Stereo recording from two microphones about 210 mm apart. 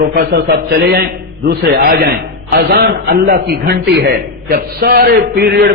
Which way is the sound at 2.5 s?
50° right (ahead or behind).